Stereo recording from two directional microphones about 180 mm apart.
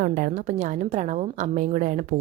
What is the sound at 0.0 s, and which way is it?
A woman's voice, 50° right (ahead or behind).